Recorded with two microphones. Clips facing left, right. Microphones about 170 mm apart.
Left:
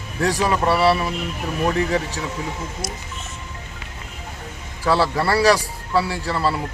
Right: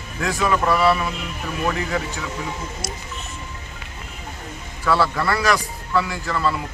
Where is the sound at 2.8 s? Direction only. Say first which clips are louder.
Left 1 dB; 55° left (ahead or behind).